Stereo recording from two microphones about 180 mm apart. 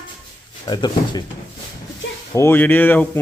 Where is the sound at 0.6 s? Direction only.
25° left (ahead or behind).